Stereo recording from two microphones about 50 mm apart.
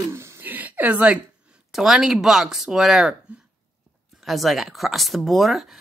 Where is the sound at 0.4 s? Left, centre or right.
Right.